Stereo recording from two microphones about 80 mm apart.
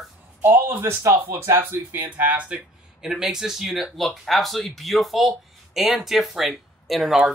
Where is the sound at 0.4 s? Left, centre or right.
Right.